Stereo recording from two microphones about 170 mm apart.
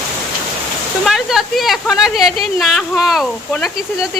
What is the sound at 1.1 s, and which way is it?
Speech, centre (ahead or behind).